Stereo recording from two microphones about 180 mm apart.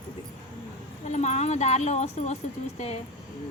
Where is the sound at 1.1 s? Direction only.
40° left (ahead or behind).